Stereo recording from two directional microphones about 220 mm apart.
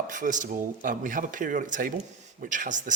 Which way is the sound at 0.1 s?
35° right (ahead or behind).